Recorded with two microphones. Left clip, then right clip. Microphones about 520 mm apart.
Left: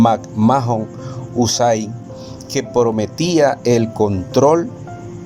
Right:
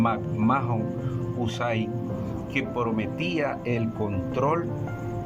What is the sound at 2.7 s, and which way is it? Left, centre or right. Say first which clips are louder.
Speech: left 16 dB; centre.